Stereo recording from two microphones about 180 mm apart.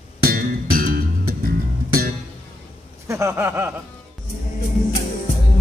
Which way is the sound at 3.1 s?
15° right (ahead or behind).